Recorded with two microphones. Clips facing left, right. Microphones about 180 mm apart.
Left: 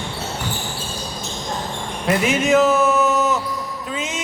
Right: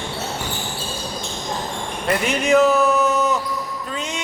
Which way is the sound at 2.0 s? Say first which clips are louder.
Left 2 dB; centre (ahead or behind).